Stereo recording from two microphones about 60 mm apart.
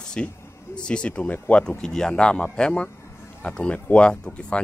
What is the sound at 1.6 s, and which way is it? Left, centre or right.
Speech, centre.